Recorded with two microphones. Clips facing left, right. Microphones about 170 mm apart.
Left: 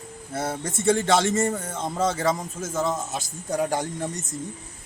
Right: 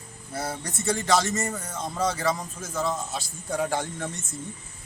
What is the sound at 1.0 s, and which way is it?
A man's voice, 25° left (ahead or behind).